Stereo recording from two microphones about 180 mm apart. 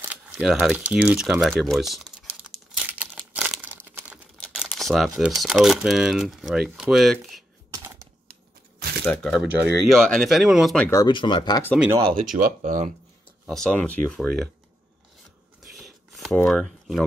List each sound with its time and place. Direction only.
0.0 s a sound: 10° right (ahead or behind)
3.3 s crumpling: 5° right (ahead or behind)
4.4 s speech: centre (ahead or behind)
7.7 s typewriter: 15° right (ahead or behind)
9.0 s speech: centre (ahead or behind)
9.4 s speech: 10° right (ahead or behind)
9.8 s speech: 5° left (ahead or behind)
10.9 s speech: 20° left (ahead or behind)
12.2 s speech: 50° right (ahead or behind)
13.5 s speech: 5° left (ahead or behind)
15.6 s a sound: centre (ahead or behind)
16.3 s speech: 5° left (ahead or behind)